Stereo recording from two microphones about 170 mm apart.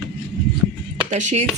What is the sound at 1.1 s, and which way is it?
Speech, 40° right (ahead or behind).